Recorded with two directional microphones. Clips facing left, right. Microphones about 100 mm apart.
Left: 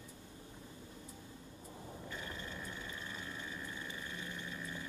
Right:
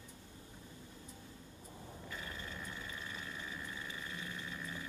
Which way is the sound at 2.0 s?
25° left (ahead or behind).